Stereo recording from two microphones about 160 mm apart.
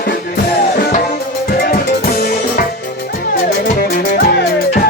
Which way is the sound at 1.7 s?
70° left (ahead or behind).